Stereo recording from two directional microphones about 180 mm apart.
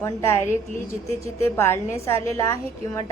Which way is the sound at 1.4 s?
15° left (ahead or behind).